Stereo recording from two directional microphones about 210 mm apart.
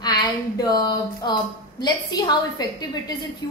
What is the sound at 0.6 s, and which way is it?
A woman's voice, 20° left (ahead or behind).